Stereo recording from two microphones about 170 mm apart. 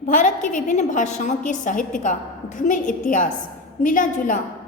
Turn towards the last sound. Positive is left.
turn(degrees=50)  # may be behind; listen again after turning